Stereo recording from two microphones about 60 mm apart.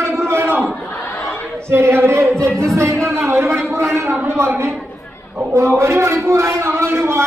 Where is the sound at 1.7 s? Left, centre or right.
Right.